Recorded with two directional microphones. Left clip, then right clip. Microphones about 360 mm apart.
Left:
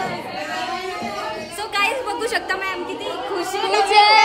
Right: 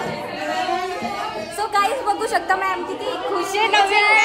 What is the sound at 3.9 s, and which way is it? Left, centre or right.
Singing, centre.